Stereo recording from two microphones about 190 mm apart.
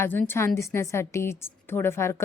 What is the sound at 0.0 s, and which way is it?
A woman's voice, 10° left (ahead or behind).